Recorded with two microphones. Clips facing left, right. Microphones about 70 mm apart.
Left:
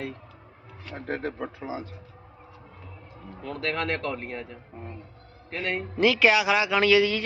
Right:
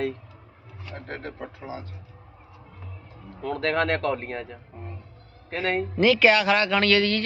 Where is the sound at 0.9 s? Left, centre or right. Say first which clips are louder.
Left 5 dB; centre.